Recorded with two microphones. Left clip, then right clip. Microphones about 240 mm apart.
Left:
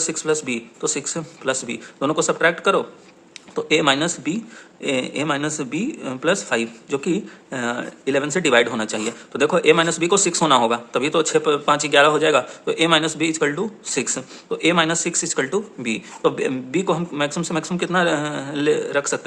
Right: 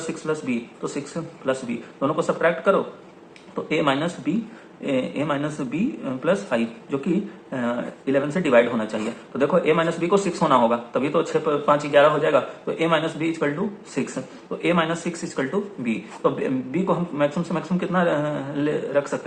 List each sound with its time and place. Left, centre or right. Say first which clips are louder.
0.1 s speech: left 1 dB; left